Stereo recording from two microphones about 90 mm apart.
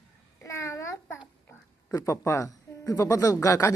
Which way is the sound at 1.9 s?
35° left (ahead or behind).